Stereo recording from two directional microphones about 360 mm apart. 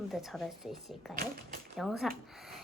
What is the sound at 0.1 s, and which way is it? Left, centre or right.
A woman's voice, centre.